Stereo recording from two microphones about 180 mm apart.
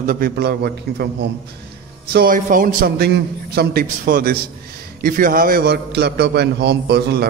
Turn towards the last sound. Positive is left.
turn(degrees=-65)  # may be behind; listen again after turning